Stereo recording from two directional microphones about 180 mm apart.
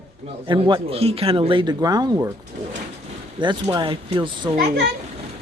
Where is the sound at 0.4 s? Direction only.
25° right (ahead or behind).